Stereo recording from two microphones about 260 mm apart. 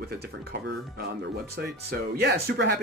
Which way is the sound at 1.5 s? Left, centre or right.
Right.